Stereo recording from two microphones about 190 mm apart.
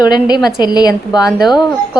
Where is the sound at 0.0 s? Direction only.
20° left (ahead or behind).